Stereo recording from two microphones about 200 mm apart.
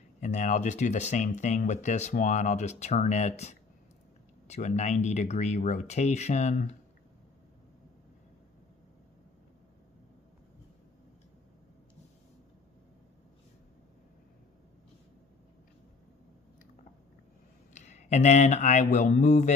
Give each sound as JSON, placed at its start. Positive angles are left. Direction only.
{"t": 0.2, "sound": "speech", "side_deg": 35}
{"t": 17.7, "sound": "speech", "side_deg": 35}